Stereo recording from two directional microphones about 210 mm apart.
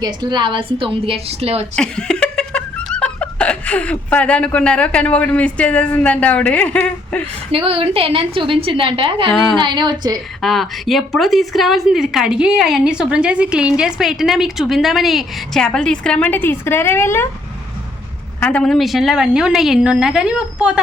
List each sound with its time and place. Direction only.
0.0 s a woman's voice: 20° right (ahead or behind)
1.7 s laughter: 5° left (ahead or behind)
7.5 s a woman's voice: 25° right (ahead or behind)
9.3 s a woman's voice: centre (ahead or behind)
9.6 s a woman's voice: 20° right (ahead or behind)
10.4 s a woman's voice: centre (ahead or behind)
18.3 s a woman's voice: 5° left (ahead or behind)